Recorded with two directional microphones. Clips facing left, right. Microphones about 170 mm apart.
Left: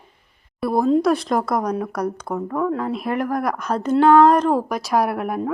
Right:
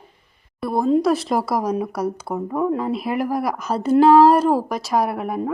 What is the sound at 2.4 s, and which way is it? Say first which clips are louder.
Speech: right 1 dB; 15° right (ahead or behind).